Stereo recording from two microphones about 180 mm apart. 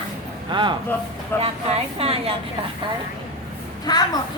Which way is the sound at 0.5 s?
25° right (ahead or behind).